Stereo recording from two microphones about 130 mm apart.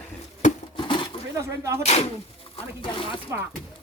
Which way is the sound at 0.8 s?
40° left (ahead or behind).